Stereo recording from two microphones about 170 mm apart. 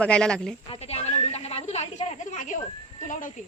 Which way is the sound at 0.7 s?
35° left (ahead or behind).